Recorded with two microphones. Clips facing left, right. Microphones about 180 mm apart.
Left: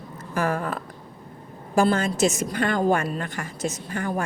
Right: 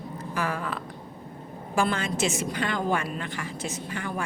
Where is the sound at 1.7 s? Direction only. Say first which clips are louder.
Left 6 dB; 40° left (ahead or behind).